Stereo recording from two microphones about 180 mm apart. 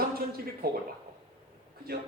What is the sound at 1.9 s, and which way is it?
Speech, 55° right (ahead or behind).